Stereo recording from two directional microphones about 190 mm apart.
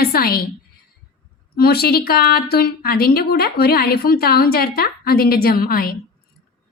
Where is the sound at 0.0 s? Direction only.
55° left (ahead or behind).